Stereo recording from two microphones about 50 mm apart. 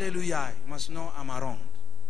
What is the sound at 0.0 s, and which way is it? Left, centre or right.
A man's voice, centre.